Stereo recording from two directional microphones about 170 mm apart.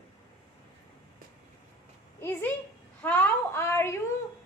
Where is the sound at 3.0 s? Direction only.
10° left (ahead or behind).